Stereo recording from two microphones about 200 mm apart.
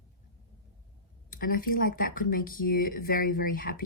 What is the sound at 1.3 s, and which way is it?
Speech, 45° left (ahead or behind).